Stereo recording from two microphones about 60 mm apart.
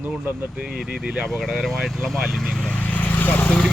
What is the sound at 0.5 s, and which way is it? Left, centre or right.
Speech, centre.